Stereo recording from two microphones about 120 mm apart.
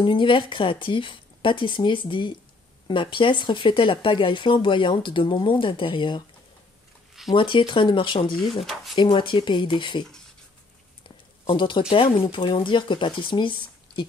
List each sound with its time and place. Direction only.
0.0 s speech: 45° left (ahead or behind)
7.3 s speech: 45° left (ahead or behind)
11.4 s speech: 45° left (ahead or behind)